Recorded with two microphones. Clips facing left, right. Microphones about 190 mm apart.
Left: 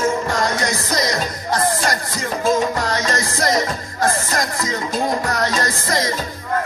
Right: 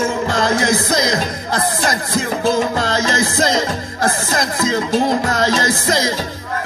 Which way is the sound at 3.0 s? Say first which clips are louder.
Right 3 dB; 90° right.